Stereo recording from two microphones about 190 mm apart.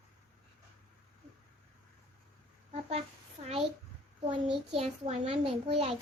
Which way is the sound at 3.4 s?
35° right (ahead or behind).